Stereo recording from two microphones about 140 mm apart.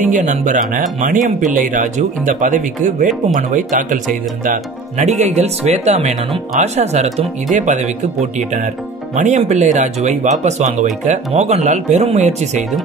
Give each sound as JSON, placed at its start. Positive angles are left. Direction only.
{"t": 0.0, "sound": "speech", "side_deg": -65}